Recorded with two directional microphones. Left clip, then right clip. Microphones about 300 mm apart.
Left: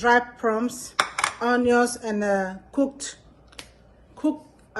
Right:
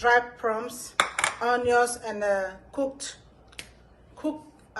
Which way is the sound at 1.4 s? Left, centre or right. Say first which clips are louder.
Left 2 dB; left.